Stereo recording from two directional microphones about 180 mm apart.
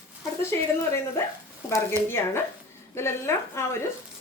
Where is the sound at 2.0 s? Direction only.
10° left (ahead or behind).